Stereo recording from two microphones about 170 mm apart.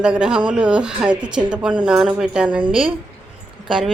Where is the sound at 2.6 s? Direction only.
30° right (ahead or behind).